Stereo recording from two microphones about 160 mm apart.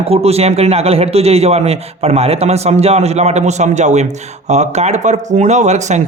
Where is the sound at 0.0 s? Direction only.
40° right (ahead or behind).